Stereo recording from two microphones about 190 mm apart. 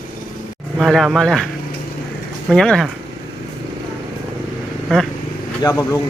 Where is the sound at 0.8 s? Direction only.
Centre (ahead or behind).